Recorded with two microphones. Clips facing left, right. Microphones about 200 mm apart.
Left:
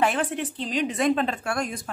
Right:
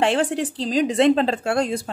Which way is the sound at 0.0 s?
30° right (ahead or behind).